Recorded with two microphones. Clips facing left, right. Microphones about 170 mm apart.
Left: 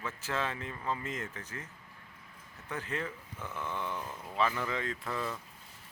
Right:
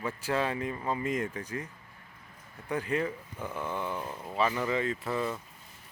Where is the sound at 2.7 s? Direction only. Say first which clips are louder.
Right 7 dB; 10° right (ahead or behind).